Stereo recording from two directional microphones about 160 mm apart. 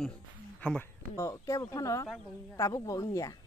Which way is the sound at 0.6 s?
10° left (ahead or behind).